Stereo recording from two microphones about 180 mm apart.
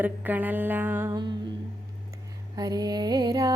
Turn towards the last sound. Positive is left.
turn(degrees=-20)  # may be behind; listen again after turning